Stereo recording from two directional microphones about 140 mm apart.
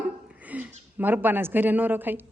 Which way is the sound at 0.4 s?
10° right (ahead or behind).